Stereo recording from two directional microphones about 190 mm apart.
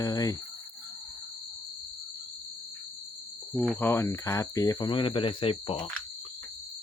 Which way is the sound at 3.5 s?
10° left (ahead or behind).